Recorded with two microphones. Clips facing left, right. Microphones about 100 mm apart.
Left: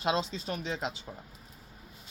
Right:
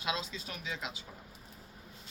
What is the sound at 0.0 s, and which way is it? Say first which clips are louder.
Speech: left 7 dB; 35° left (ahead or behind).